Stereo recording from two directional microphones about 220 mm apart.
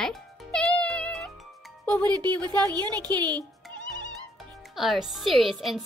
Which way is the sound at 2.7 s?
20° right (ahead or behind).